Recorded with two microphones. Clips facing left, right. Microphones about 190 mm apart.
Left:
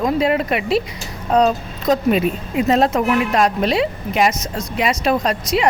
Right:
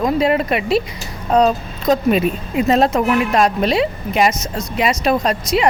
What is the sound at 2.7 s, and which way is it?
Speech, 30° right (ahead or behind).